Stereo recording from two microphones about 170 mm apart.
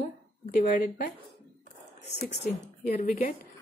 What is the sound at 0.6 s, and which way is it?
Speech, 55° left (ahead or behind).